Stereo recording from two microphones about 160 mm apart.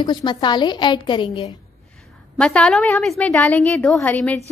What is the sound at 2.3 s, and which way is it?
A woman's voice, 5° left (ahead or behind).